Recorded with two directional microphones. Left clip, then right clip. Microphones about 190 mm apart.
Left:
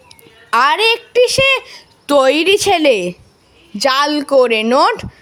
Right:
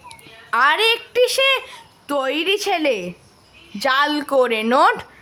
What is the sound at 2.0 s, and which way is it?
A woman's voice, 40° left (ahead or behind).